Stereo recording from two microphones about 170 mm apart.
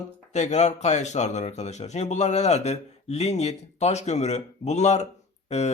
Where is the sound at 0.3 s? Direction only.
40° left (ahead or behind).